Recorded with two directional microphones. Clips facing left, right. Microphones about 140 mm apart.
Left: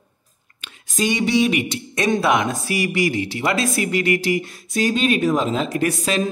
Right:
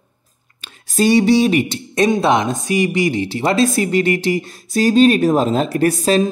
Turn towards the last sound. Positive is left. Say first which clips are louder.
# right 6 dB
turn(degrees=-35)  # may be behind; listen again after turning